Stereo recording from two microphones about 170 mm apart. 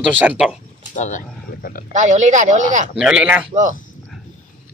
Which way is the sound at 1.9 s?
45° right (ahead or behind).